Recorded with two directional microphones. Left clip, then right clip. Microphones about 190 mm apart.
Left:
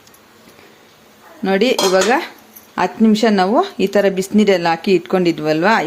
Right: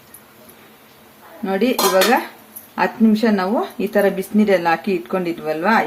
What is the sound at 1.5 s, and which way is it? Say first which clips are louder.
Speech: left 3 dB; 50° left (ahead or behind).